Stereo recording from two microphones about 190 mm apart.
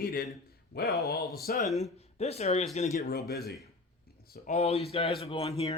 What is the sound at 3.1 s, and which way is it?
Speech, 55° left (ahead or behind).